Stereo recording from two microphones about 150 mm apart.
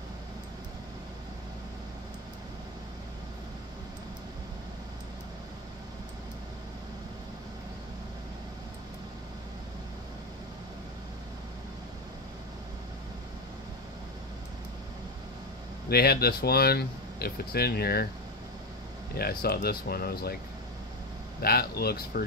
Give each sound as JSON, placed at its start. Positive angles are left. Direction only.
{"t": 15.9, "sound": "speech", "side_deg": 90}
{"t": 19.1, "sound": "speech", "side_deg": 90}
{"t": 21.4, "sound": "speech", "side_deg": 90}